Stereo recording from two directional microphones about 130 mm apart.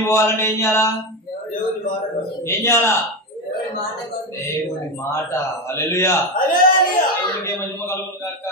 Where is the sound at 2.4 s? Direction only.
20° left (ahead or behind).